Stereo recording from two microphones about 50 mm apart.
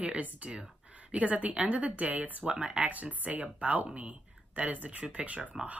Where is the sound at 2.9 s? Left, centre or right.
Right.